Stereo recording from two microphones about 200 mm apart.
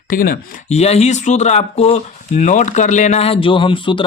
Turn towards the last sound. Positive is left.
turn(degrees=25)  # may be behind; listen again after turning